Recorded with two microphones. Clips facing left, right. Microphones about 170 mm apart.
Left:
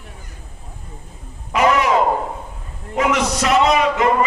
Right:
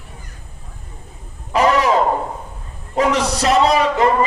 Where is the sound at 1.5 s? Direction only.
35° right (ahead or behind).